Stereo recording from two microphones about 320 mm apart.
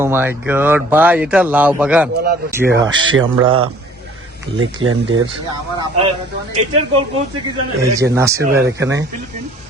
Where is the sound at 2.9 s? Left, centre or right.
Right.